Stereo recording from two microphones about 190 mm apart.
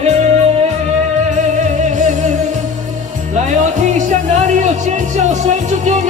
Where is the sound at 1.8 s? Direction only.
40° right (ahead or behind).